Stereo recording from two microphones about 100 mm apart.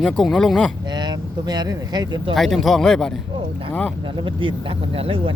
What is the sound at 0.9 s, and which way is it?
Speech, 45° right (ahead or behind).